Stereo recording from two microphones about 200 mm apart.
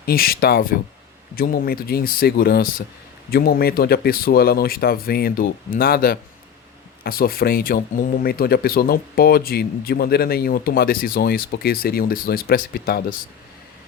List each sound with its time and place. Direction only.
0.0 s speech: 50° left (ahead or behind)